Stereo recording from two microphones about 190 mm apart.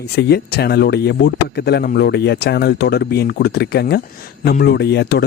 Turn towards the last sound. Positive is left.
turn(degrees=60)  # may be behind; listen again after turning